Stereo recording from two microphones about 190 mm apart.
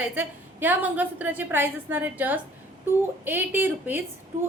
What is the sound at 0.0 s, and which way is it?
A woman's voice, 10° right (ahead or behind).